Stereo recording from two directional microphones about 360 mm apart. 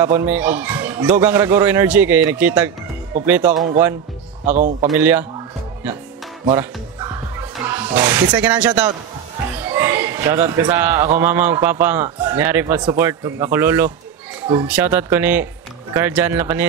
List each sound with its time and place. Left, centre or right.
0.0 s a man's voice: centre
4.5 s speech: right
6.5 s speech: centre
9.6 s a sound: centre
10.6 s a man's voice: centre